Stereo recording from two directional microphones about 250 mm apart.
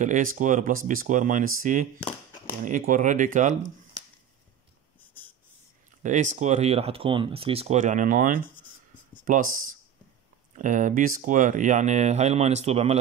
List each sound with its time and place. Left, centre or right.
0.0 s speech: right
6.0 s speech: right
10.6 s speech: right